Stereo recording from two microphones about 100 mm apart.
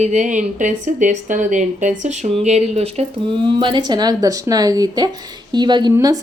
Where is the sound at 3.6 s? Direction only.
55° right (ahead or behind).